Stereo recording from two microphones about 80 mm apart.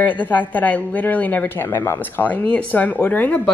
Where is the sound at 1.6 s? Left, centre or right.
Left.